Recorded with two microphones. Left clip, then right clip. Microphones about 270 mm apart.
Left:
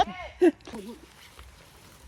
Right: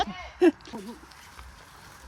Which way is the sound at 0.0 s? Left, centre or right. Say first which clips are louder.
Even; centre.